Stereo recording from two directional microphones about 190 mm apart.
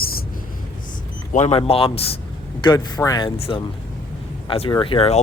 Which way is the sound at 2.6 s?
20° left (ahead or behind).